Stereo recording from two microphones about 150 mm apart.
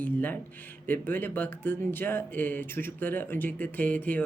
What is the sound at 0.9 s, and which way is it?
Speech, 15° left (ahead or behind).